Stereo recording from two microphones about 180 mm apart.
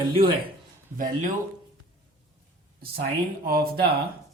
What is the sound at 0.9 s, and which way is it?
Speech, 50° right (ahead or behind).